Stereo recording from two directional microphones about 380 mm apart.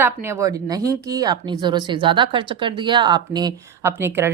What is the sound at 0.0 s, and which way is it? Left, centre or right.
A woman's voice, centre.